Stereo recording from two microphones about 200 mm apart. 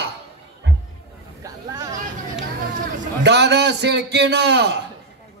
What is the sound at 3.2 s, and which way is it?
Speech, 60° right (ahead or behind).